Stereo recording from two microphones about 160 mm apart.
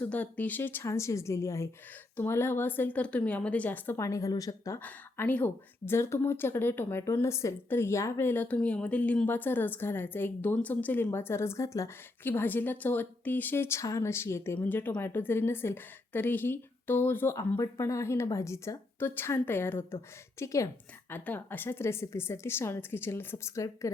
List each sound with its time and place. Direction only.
0.0 s a woman's voice: 10° left (ahead or behind)